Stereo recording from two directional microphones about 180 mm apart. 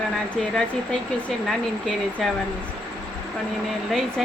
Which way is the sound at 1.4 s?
Centre (ahead or behind).